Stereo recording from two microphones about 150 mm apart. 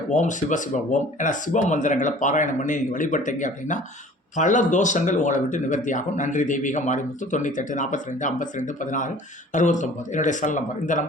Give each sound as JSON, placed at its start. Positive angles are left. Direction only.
{"t": 0.1, "sound": "speech", "side_deg": 55}